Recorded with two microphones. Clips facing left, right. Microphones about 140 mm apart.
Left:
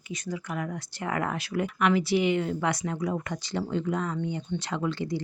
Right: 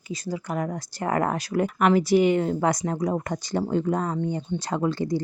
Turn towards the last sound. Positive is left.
turn(degrees=-40)  # may be behind; listen again after turning